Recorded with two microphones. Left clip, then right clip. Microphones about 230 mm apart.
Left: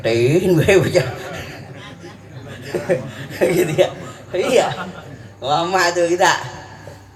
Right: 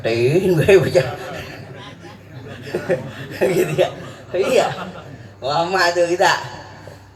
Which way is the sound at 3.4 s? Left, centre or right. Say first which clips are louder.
Left 1 dB; left.